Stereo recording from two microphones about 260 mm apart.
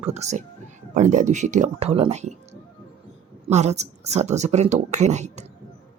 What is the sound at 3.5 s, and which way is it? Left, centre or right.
A woman's voice, right.